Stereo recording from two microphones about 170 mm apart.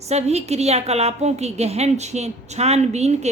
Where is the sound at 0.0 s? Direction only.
40° right (ahead or behind).